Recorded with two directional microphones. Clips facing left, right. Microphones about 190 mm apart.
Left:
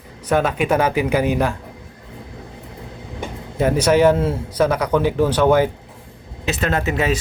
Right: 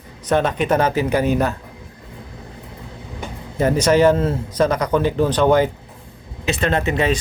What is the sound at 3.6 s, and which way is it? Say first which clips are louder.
Speech: even; 10° left (ahead or behind).